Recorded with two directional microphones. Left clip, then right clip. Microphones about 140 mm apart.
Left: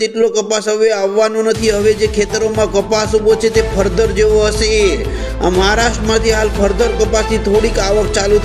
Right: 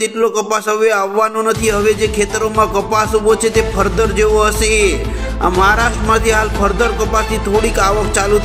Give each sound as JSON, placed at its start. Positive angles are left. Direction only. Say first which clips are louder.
{"t": 0.2, "sound": "speech", "louder": "even", "side_deg": 45}